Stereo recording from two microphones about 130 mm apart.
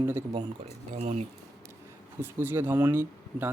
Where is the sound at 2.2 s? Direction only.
15° right (ahead or behind).